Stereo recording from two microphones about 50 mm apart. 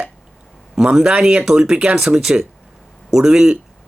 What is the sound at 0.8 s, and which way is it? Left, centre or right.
Speech, centre.